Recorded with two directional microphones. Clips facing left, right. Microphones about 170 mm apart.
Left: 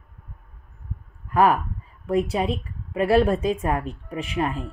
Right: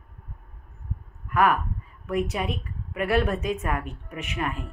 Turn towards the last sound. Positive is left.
turn(degrees=30)  # may be behind; listen again after turning